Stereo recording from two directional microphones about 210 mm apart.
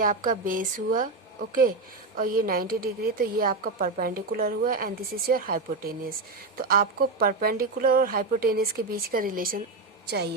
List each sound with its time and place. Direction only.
0.0 s speech: 40° right (ahead or behind)
2.1 s a woman's voice: 45° right (ahead or behind)